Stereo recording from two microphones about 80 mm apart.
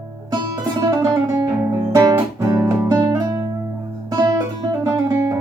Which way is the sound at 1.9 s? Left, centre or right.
Right.